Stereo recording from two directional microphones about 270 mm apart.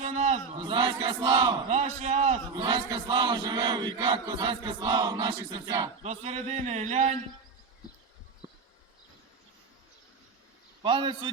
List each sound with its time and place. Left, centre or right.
0.0 s a man's voice: right
10.8 s a man's voice: centre